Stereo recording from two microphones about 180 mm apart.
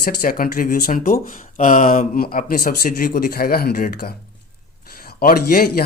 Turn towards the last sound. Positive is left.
turn(degrees=55)  # may be behind; listen again after turning